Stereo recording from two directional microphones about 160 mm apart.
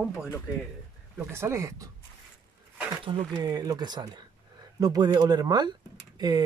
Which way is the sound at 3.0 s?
30° right (ahead or behind).